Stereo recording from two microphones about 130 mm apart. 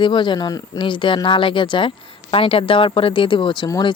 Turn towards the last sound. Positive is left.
turn(degrees=35)  # may be behind; listen again after turning